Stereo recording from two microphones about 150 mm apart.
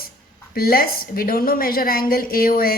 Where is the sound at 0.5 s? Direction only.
80° left.